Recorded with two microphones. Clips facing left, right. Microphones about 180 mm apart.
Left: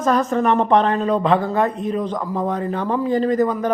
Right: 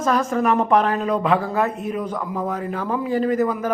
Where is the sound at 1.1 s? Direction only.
35° left (ahead or behind).